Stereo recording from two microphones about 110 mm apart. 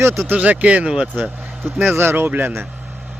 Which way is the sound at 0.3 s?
15° right (ahead or behind).